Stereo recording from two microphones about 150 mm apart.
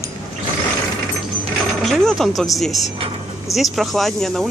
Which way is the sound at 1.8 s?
Centre (ahead or behind).